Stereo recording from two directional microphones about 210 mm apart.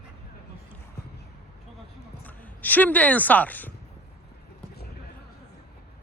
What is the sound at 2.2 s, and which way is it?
Speech, 10° left (ahead or behind).